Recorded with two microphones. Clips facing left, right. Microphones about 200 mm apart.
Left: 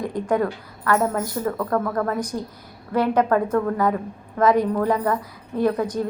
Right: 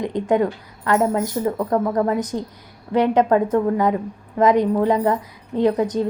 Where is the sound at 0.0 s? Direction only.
20° right (ahead or behind).